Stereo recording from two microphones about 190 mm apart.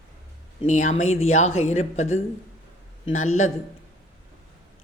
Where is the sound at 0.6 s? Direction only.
40° left (ahead or behind).